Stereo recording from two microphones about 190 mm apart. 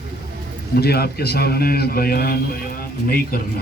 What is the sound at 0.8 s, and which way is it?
A man's voice, 55° left (ahead or behind).